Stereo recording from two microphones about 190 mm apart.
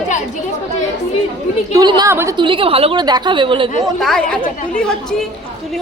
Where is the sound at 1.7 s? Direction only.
20° right (ahead or behind).